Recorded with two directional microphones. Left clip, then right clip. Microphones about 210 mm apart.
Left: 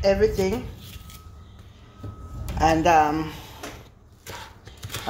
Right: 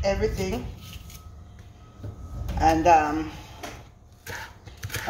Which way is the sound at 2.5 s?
50° left (ahead or behind).